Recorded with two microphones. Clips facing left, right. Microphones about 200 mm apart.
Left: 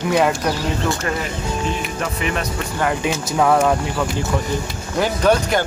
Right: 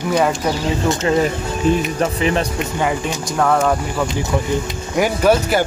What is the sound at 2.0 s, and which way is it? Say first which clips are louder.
Speech: right 5 dB; 30° right (ahead or behind).